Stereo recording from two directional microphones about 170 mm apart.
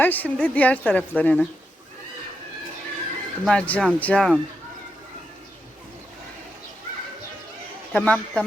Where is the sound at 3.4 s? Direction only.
5° left (ahead or behind).